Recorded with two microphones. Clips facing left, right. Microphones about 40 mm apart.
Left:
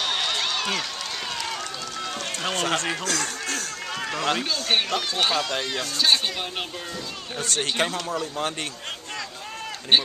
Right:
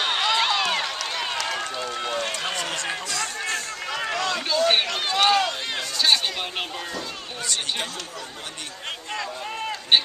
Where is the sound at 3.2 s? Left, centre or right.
Centre.